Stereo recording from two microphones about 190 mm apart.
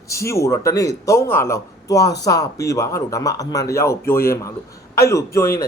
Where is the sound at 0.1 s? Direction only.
15° left (ahead or behind).